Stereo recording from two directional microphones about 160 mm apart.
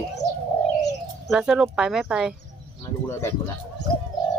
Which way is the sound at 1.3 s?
5° right (ahead or behind).